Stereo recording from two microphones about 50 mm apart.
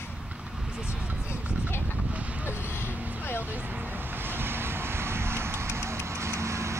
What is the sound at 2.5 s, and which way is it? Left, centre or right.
Vehicle, left.